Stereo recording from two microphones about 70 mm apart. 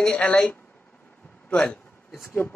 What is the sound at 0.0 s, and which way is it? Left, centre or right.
A man's voice, centre.